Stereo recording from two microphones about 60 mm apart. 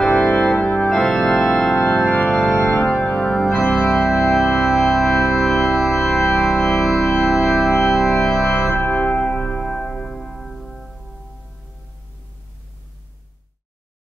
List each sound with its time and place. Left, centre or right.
0.0 s organ: centre
0.8 s organ: centre
2.0 s organ: centre
7.2 s music: centre
8.5 s music: left; by 10.9 s centre